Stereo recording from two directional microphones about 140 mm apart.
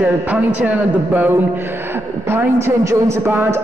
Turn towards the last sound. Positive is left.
turn(degrees=-15)  # may be behind; listen again after turning